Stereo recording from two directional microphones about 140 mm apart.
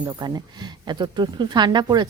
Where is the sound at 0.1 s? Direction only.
30° right (ahead or behind).